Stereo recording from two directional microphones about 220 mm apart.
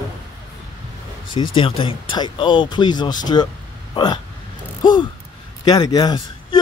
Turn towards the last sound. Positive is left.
turn(degrees=20)  # may be behind; listen again after turning